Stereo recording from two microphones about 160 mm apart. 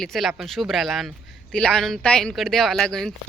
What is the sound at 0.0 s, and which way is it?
A woman's voice, centre (ahead or behind).